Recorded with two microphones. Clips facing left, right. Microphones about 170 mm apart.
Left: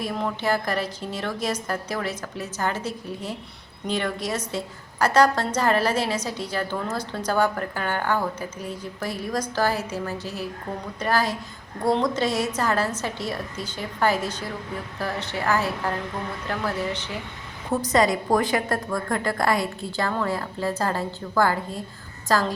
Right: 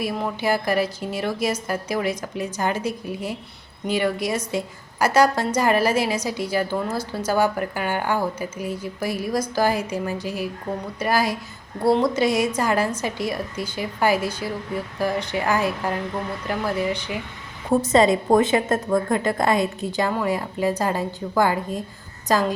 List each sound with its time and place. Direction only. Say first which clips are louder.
0.0 s a woman's voice: right 2 dB; 10° right (ahead or behind)
17.7 s a woman's voice: right 4 dB; 25° right (ahead or behind)